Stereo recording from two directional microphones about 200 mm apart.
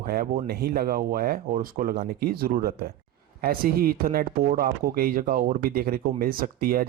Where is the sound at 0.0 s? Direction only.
45° right (ahead or behind).